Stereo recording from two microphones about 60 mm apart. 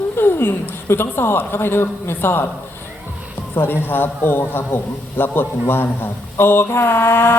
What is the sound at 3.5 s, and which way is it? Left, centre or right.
A man's voice, left.